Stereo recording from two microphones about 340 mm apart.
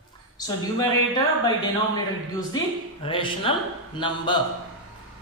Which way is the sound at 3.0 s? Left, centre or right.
Centre.